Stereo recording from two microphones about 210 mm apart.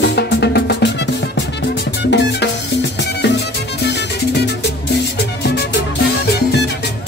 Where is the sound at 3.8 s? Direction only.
50° left (ahead or behind).